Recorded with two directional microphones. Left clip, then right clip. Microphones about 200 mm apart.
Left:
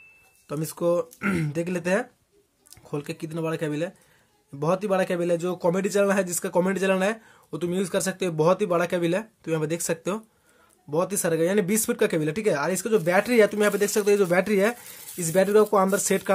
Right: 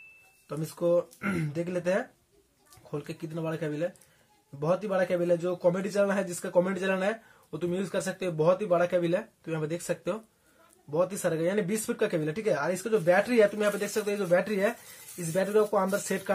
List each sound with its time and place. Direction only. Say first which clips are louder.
0.5 s speech: left 3 dB; 55° left (ahead or behind)